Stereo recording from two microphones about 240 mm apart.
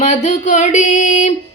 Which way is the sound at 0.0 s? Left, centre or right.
Left.